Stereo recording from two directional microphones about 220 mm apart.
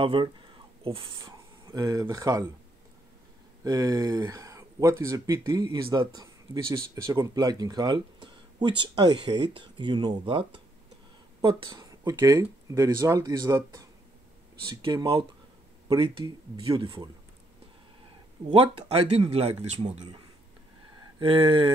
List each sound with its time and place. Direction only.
0.0 s speech: 20° right (ahead or behind)
3.6 s speech: 15° right (ahead or behind)
11.4 s speech: 20° right (ahead or behind)
18.5 s speech: 25° right (ahead or behind)
21.2 s speech: 25° right (ahead or behind)